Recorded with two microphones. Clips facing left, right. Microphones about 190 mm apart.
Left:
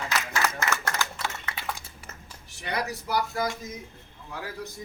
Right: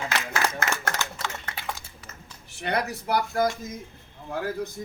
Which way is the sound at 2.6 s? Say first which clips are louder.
Right 4 dB; 55° right (ahead or behind).